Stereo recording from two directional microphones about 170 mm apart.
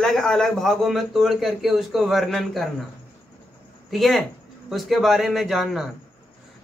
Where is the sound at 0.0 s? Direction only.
Centre (ahead or behind).